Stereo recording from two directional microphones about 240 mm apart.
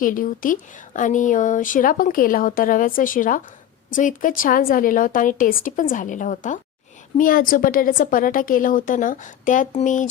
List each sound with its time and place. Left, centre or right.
0.0 s speech: left